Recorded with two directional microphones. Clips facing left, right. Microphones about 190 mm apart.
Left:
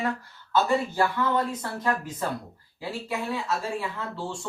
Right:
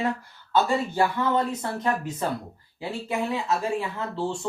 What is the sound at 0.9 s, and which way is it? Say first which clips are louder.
Speech: right 1 dB; 20° right (ahead or behind).